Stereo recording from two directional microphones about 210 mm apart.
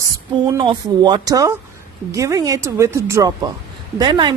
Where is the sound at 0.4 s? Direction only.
20° right (ahead or behind).